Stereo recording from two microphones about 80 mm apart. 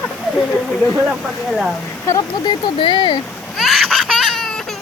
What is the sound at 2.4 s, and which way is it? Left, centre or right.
Speech, left.